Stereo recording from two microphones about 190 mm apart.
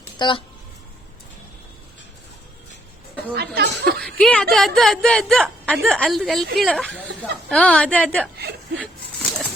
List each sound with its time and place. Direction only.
0.2 s speech: 25° left (ahead or behind)
3.3 s speech: 55° right (ahead or behind)
4.0 s a woman's voice: 5° left (ahead or behind)
8.4 s speech: 60° right (ahead or behind)